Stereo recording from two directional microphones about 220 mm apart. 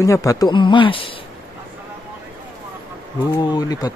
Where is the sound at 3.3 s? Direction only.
15° left (ahead or behind).